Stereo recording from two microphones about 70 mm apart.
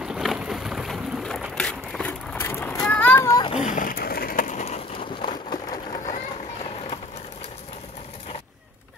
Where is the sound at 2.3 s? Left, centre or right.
Left.